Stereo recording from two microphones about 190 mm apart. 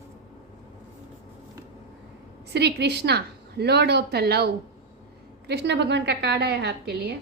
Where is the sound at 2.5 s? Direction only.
60° right (ahead or behind).